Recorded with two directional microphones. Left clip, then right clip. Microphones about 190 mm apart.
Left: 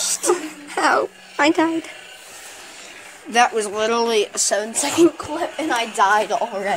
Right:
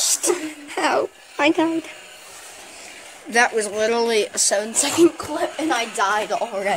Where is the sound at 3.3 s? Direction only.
5° left (ahead or behind).